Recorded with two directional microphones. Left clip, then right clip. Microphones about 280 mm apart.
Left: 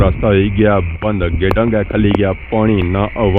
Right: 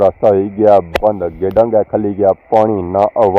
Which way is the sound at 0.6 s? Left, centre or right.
Centre.